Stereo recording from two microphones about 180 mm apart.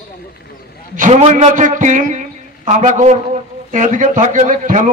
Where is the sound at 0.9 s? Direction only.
45° right (ahead or behind).